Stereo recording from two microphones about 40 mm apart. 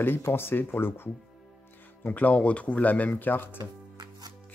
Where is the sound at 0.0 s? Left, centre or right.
Left.